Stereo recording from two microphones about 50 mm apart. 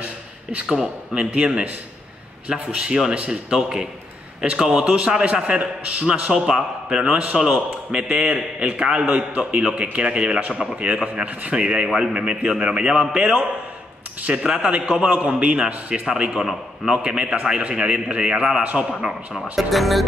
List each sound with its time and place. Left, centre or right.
0.0 s a sound: right
0.7 s a man's voice: centre
1.3 s a man's voice: right
6.3 s a man's voice: centre
8.1 s a man's voice: right
14.2 s a man's voice: right
19.5 s speech: centre